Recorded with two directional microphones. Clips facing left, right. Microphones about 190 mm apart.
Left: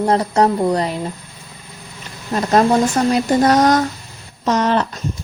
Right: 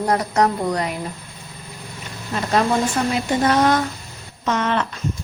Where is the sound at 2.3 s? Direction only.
40° left (ahead or behind).